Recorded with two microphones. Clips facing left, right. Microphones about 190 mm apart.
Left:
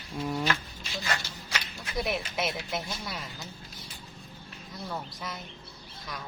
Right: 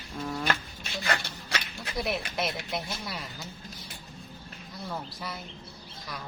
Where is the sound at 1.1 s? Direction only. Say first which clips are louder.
Right 3 dB; 60° right (ahead or behind).